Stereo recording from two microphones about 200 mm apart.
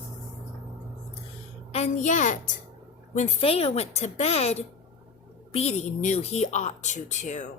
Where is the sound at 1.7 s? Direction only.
35° left (ahead or behind).